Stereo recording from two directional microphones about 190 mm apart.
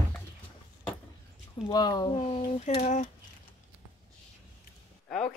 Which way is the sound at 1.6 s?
20° left (ahead or behind).